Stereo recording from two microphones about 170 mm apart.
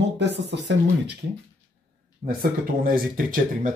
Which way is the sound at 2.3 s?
55° right (ahead or behind).